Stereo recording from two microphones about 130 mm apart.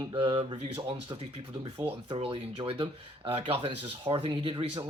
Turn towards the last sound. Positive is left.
turn(degrees=-40)  # may be behind; listen again after turning